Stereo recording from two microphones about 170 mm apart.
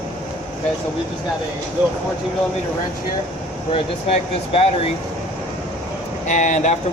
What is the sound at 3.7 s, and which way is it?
Speech, 35° left (ahead or behind).